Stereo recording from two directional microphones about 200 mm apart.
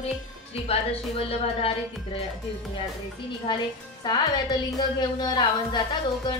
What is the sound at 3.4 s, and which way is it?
A woman's voice, 20° left (ahead or behind).